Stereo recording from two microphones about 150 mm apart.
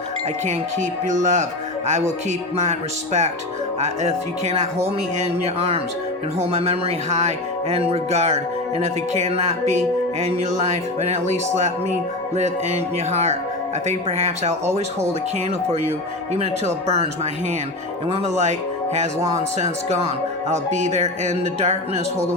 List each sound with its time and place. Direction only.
0.4 s music: 55° right (ahead or behind)
5.2 s speech: 45° right (ahead or behind)
6.4 s music: 45° right (ahead or behind)
16.6 s music: 45° right (ahead or behind)
18.1 s music: 50° right (ahead or behind)